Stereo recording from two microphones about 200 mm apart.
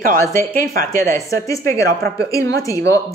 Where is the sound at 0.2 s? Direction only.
15° left (ahead or behind).